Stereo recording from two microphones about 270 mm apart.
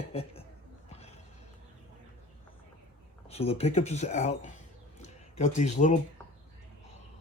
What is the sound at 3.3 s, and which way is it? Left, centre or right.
Speech, left.